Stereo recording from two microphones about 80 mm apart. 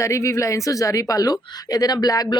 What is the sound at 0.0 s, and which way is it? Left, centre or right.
Speech, left.